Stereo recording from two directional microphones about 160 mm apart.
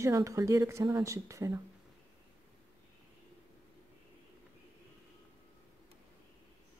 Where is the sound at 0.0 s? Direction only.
20° right (ahead or behind).